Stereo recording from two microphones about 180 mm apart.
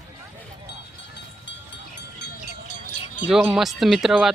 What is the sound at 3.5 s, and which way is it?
Speech, centre (ahead or behind).